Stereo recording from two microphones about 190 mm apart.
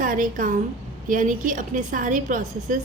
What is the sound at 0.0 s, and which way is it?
A woman's voice, 45° right (ahead or behind).